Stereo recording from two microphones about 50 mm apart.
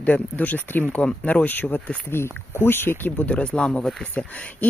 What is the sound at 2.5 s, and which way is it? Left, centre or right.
Speech, left.